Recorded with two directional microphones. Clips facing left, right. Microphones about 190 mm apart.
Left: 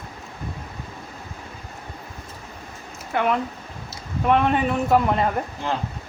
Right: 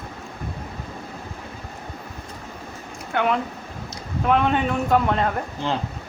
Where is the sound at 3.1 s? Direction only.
Centre (ahead or behind).